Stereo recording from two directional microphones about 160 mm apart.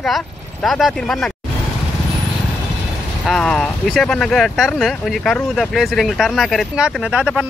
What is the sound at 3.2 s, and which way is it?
Speech, 5° left (ahead or behind).